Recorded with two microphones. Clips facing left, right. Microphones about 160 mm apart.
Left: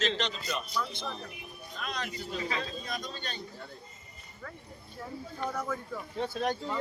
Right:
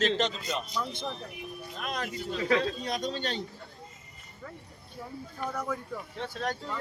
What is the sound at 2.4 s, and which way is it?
Speech, 65° right (ahead or behind).